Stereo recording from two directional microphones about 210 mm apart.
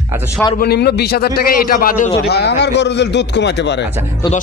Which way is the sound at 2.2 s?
50° left (ahead or behind).